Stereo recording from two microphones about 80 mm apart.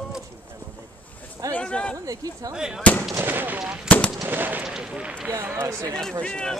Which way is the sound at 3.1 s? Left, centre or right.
Right.